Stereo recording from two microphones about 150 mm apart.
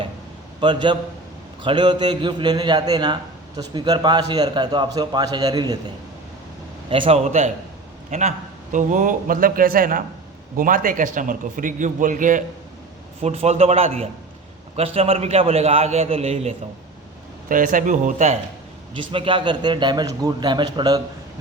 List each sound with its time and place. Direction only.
0.6 s a man's voice: 30° right (ahead or behind)
6.9 s a man's voice: 40° right (ahead or behind)
8.7 s a man's voice: 55° right (ahead or behind)
13.2 s a man's voice: 45° right (ahead or behind)
17.5 s a man's voice: 65° right (ahead or behind)
18.9 s a man's voice: 35° right (ahead or behind)